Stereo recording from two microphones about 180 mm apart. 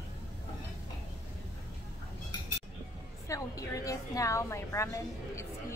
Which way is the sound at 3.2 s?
20° left (ahead or behind).